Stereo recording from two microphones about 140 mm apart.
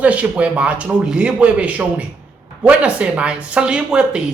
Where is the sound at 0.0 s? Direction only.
10° right (ahead or behind).